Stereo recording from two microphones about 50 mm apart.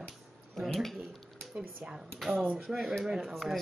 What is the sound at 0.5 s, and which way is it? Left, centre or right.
Speech, centre.